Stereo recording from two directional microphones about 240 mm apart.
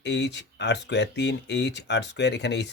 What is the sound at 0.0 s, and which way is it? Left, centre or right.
Speech, left.